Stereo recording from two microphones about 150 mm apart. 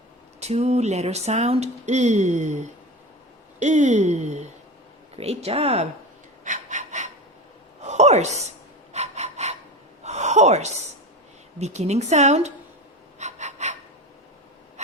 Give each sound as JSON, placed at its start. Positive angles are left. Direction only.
{"t": 0.3, "sound": "speech", "side_deg": -45}
{"t": 6.4, "sound": "breathing", "side_deg": -55}
{"t": 7.8, "sound": "a sound", "side_deg": -50}
{"t": 8.9, "sound": "breathing", "side_deg": -50}
{"t": 10.0, "sound": "gasp", "side_deg": -50}
{"t": 11.6, "sound": "speech", "side_deg": -45}
{"t": 13.1, "sound": "pant", "side_deg": -50}